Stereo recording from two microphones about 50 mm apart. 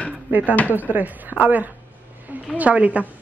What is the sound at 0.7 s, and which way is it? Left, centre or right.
Speech, right.